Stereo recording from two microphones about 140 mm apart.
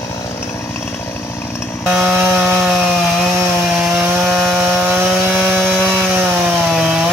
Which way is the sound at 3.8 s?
10° right (ahead or behind).